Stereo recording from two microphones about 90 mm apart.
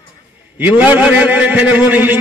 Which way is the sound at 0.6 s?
20° right (ahead or behind).